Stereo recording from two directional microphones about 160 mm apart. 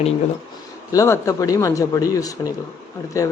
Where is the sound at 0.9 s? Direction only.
20° left (ahead or behind).